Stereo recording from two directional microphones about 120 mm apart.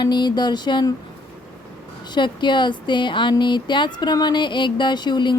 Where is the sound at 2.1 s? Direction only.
40° left (ahead or behind).